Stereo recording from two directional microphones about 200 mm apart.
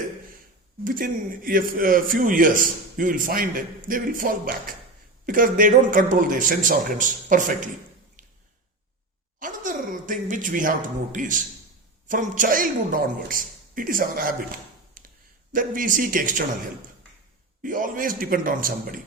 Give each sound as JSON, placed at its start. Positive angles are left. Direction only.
{"t": 0.9, "sound": "speech", "side_deg": -45}
{"t": 9.4, "sound": "a man's voice", "side_deg": -40}
{"t": 15.5, "sound": "speech", "side_deg": -45}
{"t": 17.6, "sound": "speech", "side_deg": -40}